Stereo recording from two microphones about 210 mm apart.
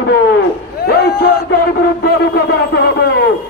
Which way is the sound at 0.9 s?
50° left (ahead or behind).